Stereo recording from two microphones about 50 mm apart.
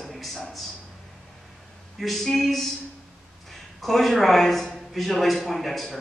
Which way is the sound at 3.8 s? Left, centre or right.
Centre.